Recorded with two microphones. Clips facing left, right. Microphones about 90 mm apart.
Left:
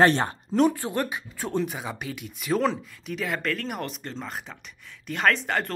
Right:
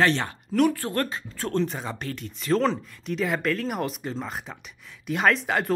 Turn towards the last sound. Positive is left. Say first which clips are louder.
# right 1 dB
turn(degrees=-5)  # may be behind; listen again after turning